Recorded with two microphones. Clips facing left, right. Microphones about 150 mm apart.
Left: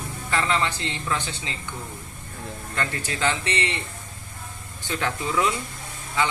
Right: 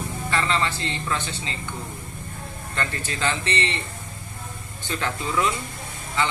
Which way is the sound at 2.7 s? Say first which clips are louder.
Even; 15° left (ahead or behind).